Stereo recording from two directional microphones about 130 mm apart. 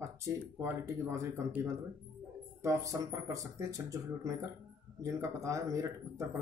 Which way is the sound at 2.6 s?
25° right (ahead or behind).